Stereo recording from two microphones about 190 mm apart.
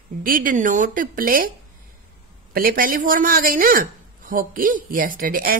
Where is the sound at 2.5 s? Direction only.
50° right (ahead or behind).